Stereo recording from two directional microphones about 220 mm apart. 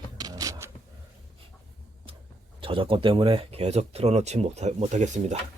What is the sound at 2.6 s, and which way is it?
Speech, 25° right (ahead or behind).